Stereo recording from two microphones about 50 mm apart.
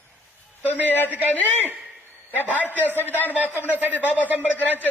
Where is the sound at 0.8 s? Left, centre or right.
Left.